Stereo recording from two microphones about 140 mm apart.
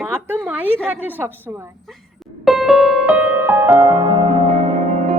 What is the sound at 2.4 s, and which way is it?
Music, centre (ahead or behind).